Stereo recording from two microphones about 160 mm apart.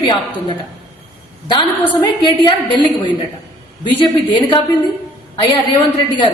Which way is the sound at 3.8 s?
30° left (ahead or behind).